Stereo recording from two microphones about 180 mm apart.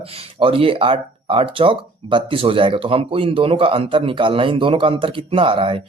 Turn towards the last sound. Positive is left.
turn(degrees=-30)  # may be behind; listen again after turning